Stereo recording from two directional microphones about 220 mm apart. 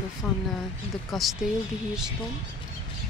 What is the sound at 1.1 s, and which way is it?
Speech, centre (ahead or behind).